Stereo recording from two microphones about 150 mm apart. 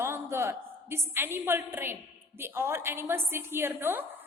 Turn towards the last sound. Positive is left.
turn(degrees=-15)  # may be behind; listen again after turning